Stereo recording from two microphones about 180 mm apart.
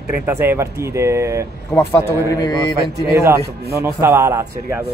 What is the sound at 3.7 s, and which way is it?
Speech, 15° right (ahead or behind).